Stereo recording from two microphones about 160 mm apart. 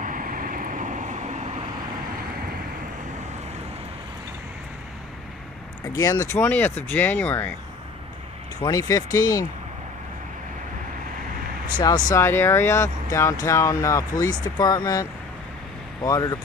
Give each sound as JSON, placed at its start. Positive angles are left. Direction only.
{"t": 0.0, "sound": "vehicle", "side_deg": -55}
{"t": 5.9, "sound": "speech", "side_deg": 20}
{"t": 8.6, "sound": "speech", "side_deg": 20}
{"t": 11.8, "sound": "speech", "side_deg": 25}